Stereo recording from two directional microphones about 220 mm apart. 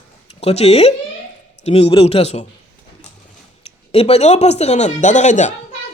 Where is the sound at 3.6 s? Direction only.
25° left (ahead or behind).